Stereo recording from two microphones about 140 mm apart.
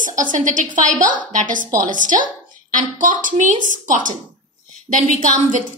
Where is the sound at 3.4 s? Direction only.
70° right (ahead or behind).